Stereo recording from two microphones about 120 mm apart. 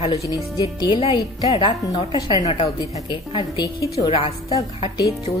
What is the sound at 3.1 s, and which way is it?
Speech, 35° left (ahead or behind).